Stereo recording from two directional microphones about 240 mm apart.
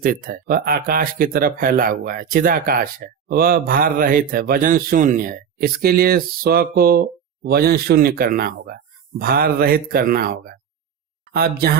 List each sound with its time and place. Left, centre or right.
0.0 s speech: right